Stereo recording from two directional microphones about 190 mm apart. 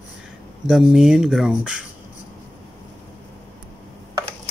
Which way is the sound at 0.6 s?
Centre (ahead or behind).